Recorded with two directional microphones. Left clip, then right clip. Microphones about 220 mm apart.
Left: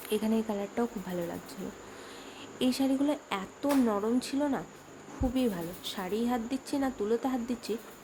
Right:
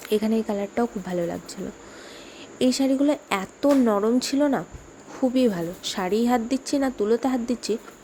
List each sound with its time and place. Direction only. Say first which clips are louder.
0.1 s speech: right 7 dB; 20° right (ahead or behind)
2.6 s speech: right 8 dB; 20° right (ahead or behind)